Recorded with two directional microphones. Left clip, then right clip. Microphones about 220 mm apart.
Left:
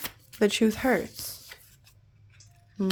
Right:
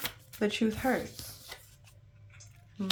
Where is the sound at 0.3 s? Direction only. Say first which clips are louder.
Left 7 dB; 45° left (ahead or behind).